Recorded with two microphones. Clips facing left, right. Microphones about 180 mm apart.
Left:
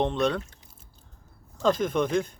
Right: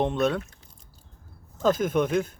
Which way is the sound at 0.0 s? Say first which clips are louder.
Right 1 dB; 5° right (ahead or behind).